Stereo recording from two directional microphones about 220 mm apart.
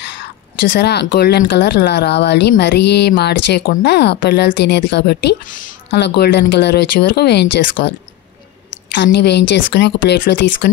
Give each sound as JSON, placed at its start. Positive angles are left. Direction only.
{"t": 0.7, "sound": "speech", "side_deg": 50}